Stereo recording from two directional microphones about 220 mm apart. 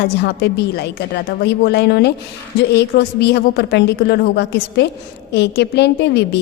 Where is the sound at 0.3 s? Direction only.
50° left (ahead or behind).